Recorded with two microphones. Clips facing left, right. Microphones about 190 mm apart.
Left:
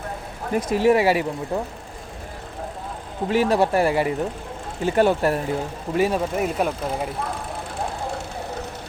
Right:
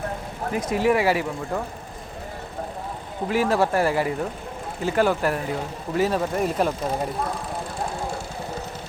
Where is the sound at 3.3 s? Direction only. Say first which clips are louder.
Left 2 dB; 20° left (ahead or behind).